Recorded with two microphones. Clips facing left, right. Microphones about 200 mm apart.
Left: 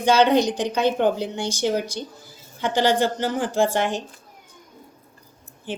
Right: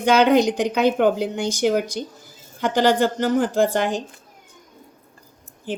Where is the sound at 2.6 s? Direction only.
45° right (ahead or behind).